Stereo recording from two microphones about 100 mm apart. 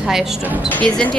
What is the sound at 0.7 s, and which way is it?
Speech, 15° left (ahead or behind).